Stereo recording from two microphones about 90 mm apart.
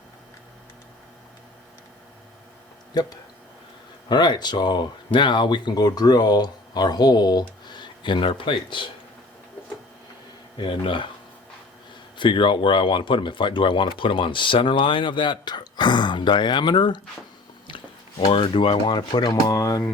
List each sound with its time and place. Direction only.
2.9 s speech: 50° left (ahead or behind); by 8.8 s 70° left (ahead or behind)
10.6 s speech: 70° left (ahead or behind)
12.1 s speech: 65° left (ahead or behind)
18.3 s speech: 75° left (ahead or behind); by 19.3 s 55° left (ahead or behind)
19.5 s speech: 35° left (ahead or behind)